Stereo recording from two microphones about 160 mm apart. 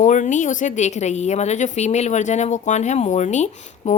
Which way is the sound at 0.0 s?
50° left (ahead or behind).